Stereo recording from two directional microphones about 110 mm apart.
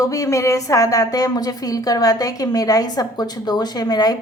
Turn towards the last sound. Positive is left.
turn(degrees=40)  # may be behind; listen again after turning